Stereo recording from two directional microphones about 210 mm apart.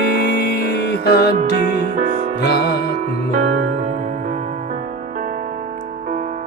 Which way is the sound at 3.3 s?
35° right (ahead or behind).